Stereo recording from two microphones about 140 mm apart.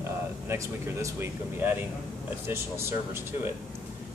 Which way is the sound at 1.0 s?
15° right (ahead or behind).